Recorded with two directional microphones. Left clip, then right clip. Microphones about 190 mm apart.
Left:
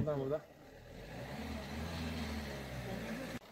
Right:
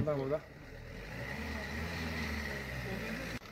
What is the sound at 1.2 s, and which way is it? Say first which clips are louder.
Vehicle: right 5 dB; 35° right (ahead or behind).